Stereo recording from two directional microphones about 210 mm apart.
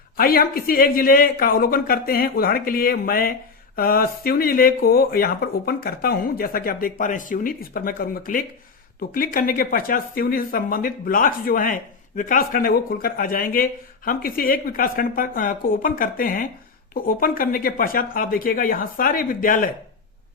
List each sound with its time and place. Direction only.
0.2 s speech: 45° left (ahead or behind)